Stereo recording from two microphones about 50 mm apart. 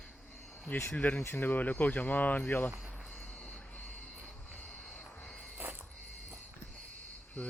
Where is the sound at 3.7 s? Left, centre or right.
Left.